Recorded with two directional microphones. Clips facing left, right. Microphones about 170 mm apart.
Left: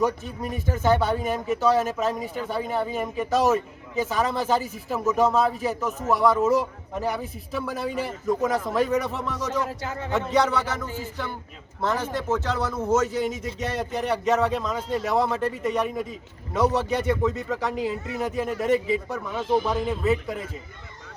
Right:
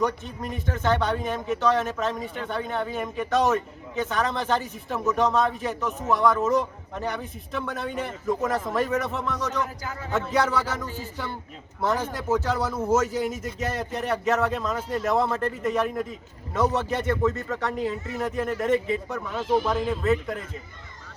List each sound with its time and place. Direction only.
0.0 s a man's voice: 10° left (ahead or behind)
9.6 s a man's voice: 25° left (ahead or behind)
10.1 s a man's voice: 5° right (ahead or behind)
11.8 s a man's voice: 10° right (ahead or behind)